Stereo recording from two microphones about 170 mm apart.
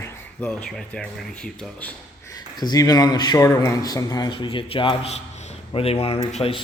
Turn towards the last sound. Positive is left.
turn(degrees=35)  # may be behind; listen again after turning